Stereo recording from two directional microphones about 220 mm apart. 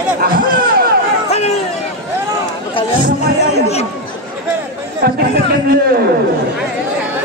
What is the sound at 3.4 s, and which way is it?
Chatter, 30° left (ahead or behind).